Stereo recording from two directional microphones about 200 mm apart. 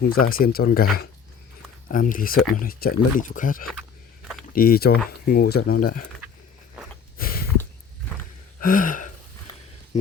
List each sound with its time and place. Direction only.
0.1 s speech: 45° left (ahead or behind)
7.2 s a sound: 45° left (ahead or behind)
8.6 s gasp: 45° left (ahead or behind)
9.9 s speech: 35° left (ahead or behind)